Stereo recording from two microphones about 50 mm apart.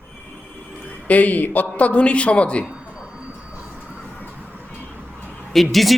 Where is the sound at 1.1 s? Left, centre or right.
Left.